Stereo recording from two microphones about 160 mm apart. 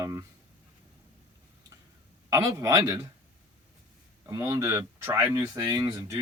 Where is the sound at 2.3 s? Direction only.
20° right (ahead or behind).